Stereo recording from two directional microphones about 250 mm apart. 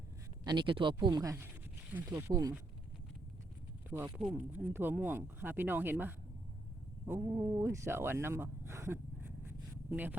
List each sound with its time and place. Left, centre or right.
0.4 s speech: centre
3.8 s speech: centre